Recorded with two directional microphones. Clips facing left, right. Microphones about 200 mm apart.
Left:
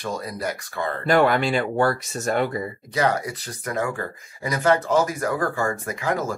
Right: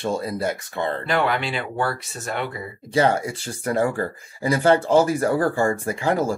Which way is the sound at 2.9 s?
25° right (ahead or behind).